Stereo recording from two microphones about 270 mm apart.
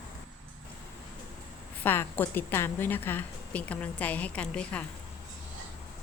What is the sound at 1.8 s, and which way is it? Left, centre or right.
A woman's voice, centre.